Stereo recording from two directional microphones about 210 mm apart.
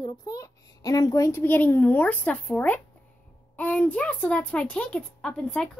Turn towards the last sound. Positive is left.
turn(degrees=5)  # may be behind; listen again after turning